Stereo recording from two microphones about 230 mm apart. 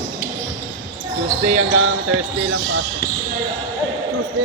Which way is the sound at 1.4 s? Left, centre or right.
Right.